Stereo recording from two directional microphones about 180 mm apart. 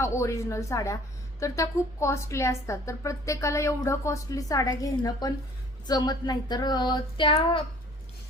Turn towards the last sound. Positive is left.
turn(degrees=30)  # may be behind; listen again after turning